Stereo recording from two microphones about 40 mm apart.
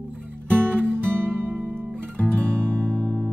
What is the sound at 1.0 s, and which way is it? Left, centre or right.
Music, right.